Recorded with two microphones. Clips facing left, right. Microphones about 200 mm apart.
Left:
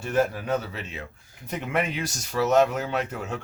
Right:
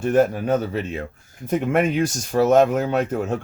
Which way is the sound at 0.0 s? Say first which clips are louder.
Right 7 dB; 50° right (ahead or behind).